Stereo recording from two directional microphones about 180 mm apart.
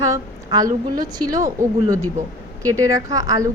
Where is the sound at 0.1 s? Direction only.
20° right (ahead or behind).